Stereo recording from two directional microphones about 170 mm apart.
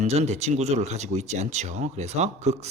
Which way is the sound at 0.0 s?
40° right (ahead or behind).